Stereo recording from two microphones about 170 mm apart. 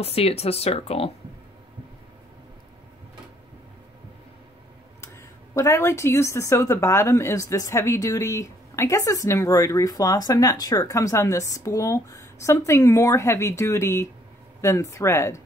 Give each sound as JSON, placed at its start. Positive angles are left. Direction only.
{"t": 0.0, "sound": "speech", "side_deg": 35}
{"t": 5.0, "sound": "speech", "side_deg": 15}